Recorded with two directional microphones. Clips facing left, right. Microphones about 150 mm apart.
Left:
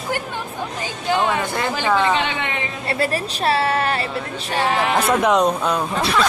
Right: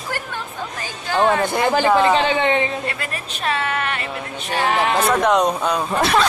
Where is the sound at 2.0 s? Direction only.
35° right (ahead or behind).